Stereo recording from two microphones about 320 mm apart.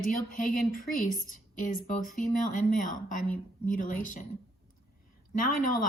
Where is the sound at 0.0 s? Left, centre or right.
Left.